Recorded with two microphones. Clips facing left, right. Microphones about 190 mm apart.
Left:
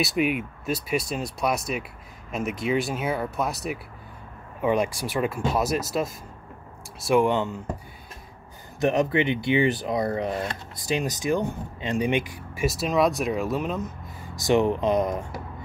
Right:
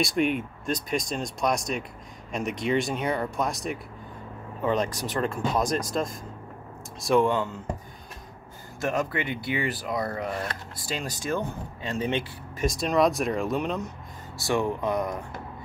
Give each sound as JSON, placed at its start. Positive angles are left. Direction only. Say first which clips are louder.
{"t": 0.0, "sound": "speech", "louder": "even", "side_deg": 5}
{"t": 7.2, "sound": "speech", "louder": "left 2 dB", "side_deg": 20}
{"t": 8.7, "sound": "speech", "louder": "left 6 dB", "side_deg": 20}
{"t": 14.3, "sound": "speech", "louder": "left 5 dB", "side_deg": 20}